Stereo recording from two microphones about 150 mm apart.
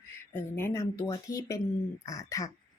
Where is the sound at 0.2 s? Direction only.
15° left (ahead or behind).